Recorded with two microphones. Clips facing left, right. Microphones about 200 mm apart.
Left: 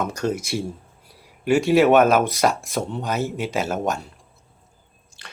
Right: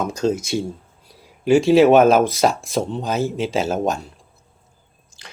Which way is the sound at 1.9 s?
25° right (ahead or behind).